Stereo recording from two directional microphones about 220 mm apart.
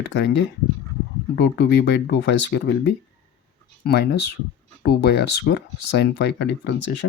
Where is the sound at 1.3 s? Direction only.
50° left (ahead or behind).